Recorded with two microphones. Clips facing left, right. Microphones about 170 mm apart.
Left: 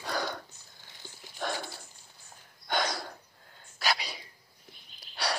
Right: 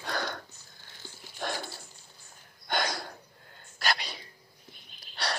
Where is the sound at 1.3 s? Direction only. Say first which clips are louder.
Even; 5° right (ahead or behind).